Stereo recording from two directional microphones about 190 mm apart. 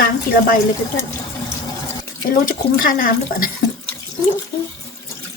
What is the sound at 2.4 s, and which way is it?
Speech, 45° left (ahead or behind).